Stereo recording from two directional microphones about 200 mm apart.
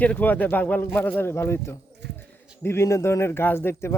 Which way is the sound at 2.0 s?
60° right (ahead or behind).